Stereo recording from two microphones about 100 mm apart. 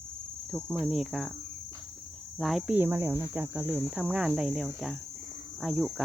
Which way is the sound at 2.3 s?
Centre (ahead or behind).